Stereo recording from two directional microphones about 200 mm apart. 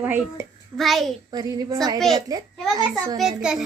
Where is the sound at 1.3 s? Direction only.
20° right (ahead or behind).